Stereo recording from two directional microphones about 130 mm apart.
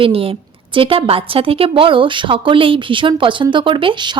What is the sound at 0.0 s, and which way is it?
A woman's voice, 45° right (ahead or behind).